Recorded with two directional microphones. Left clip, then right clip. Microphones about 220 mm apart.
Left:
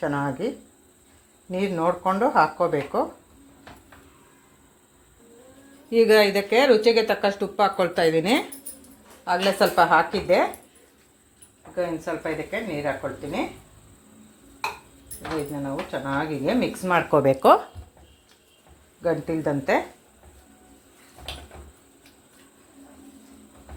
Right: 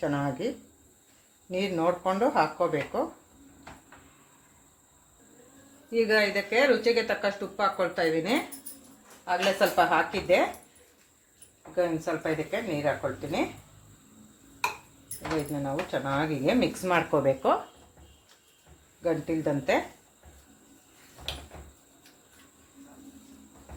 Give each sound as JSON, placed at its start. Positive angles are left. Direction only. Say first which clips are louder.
{"t": 0.0, "sound": "speech", "louder": "left 4 dB", "side_deg": 15}
{"t": 1.5, "sound": "speech", "louder": "left 3 dB", "side_deg": 15}
{"t": 5.9, "sound": "speech", "louder": "left 7 dB", "side_deg": 45}
{"t": 11.8, "sound": "speech", "louder": "left 1 dB", "side_deg": 15}
{"t": 15.9, "sound": "speech", "louder": "left 3 dB", "side_deg": 10}
{"t": 17.1, "sound": "speech", "louder": "left 12 dB", "side_deg": 40}
{"t": 19.0, "sound": "speech", "louder": "left 4 dB", "side_deg": 25}